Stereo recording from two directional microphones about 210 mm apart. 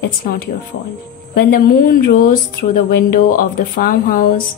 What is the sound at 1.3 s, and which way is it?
A woman's voice, 45° left (ahead or behind).